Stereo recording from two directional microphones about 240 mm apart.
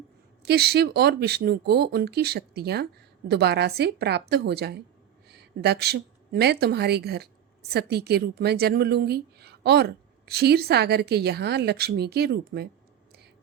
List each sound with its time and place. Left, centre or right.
0.4 s a woman's voice: right